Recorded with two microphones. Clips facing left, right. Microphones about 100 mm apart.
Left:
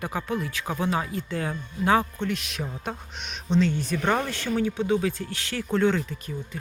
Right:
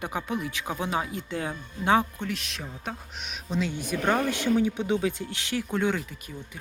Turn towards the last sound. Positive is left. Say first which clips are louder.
# left 6 dB
turn(degrees=-10)  # may be behind; listen again after turning